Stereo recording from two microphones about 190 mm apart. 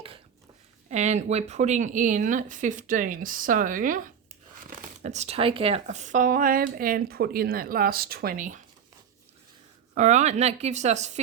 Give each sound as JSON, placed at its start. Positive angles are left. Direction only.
{"t": 0.9, "sound": "speech", "side_deg": -35}
{"t": 9.9, "sound": "speech", "side_deg": -40}